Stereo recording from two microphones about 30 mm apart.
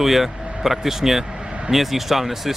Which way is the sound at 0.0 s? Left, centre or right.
Centre.